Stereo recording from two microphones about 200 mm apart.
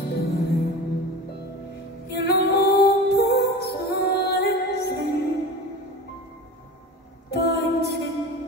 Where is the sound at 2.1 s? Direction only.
55° left (ahead or behind).